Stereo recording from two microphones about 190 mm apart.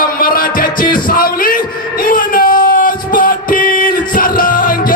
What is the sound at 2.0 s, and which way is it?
Music, 50° left (ahead or behind).